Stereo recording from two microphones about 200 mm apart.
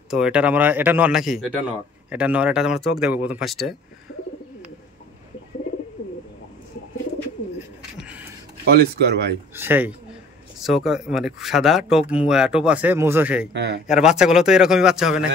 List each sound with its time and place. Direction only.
0.1 s speech: 5° right (ahead or behind)
8.0 s a sound: 10° right (ahead or behind)
8.6 s speech: 55° right (ahead or behind)
9.5 s speech: 10° right (ahead or behind)
13.5 s speech: 55° right (ahead or behind)
13.8 s speech: 5° right (ahead or behind)